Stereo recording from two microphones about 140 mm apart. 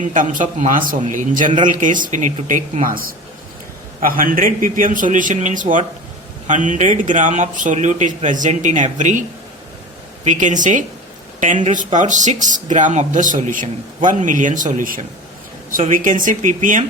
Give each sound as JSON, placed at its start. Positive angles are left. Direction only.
{"t": 0.0, "sound": "a man's voice", "side_deg": -70}
{"t": 10.2, "sound": "a man's voice", "side_deg": -65}